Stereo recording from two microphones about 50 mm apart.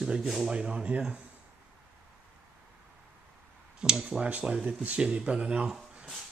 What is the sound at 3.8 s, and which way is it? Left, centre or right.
Speech, centre.